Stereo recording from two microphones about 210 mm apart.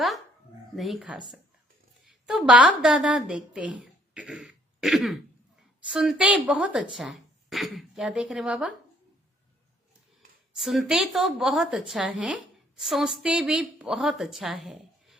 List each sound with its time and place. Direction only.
0.8 s a woman's voice: centre (ahead or behind)
10.5 s a woman's voice: centre (ahead or behind)